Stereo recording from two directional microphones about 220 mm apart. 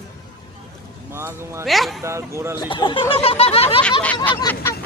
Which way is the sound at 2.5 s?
20° left (ahead or behind).